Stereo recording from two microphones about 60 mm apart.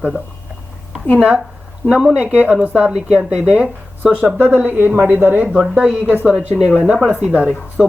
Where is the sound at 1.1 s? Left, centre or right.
Right.